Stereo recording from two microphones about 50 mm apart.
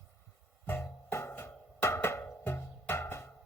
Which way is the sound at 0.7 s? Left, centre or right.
Left.